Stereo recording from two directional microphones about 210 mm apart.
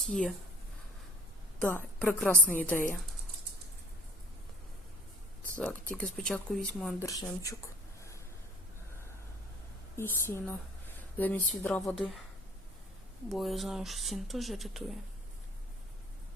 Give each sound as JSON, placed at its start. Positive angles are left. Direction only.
{"t": 0.0, "sound": "speech", "side_deg": 0}
{"t": 1.6, "sound": "speech", "side_deg": 5}
{"t": 6.0, "sound": "speech", "side_deg": 5}
{"t": 7.0, "sound": "speech", "side_deg": 15}
{"t": 9.9, "sound": "speech", "side_deg": 10}
{"t": 13.2, "sound": "speech", "side_deg": 0}